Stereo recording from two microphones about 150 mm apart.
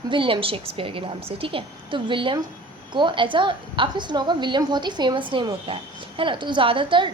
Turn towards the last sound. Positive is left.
turn(degrees=-35)  # may be behind; listen again after turning